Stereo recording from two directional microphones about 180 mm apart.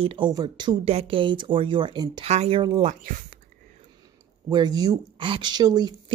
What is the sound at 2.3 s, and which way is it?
Speech, 35° right (ahead or behind).